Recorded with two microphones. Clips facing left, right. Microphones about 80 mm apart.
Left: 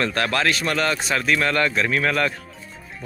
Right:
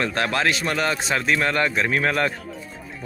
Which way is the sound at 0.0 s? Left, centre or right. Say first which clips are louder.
Even; right.